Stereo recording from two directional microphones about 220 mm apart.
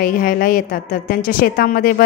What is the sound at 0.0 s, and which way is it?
A woman's voice, 40° left (ahead or behind).